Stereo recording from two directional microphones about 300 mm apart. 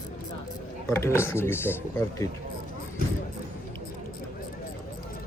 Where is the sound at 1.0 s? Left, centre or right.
Centre.